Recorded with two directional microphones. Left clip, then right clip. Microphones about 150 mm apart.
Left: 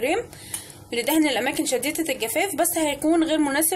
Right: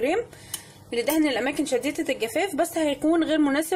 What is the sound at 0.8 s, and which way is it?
Speech, 20° right (ahead or behind).